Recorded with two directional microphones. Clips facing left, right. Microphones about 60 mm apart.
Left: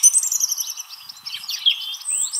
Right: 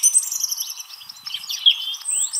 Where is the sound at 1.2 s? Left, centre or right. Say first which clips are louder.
Right 3 dB; left.